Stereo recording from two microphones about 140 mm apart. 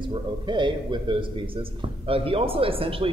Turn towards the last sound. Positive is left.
turn(degrees=-40)  # may be behind; listen again after turning